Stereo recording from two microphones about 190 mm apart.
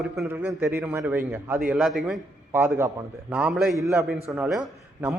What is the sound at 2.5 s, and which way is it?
A man's voice, 15° right (ahead or behind).